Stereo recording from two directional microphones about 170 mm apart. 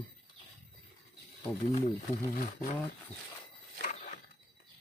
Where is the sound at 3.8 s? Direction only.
50° left (ahead or behind).